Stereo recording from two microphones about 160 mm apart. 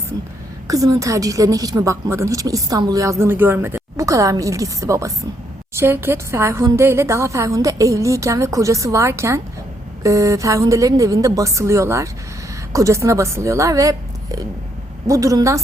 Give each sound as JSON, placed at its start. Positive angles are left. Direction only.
{"t": 0.7, "sound": "a woman's voice", "side_deg": -20}